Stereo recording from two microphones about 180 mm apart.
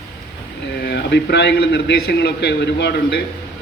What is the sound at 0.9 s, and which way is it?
A man's voice, 70° left (ahead or behind).